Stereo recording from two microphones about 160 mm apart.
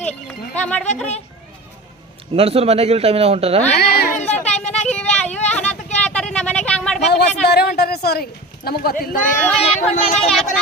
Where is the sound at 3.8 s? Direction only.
80° left.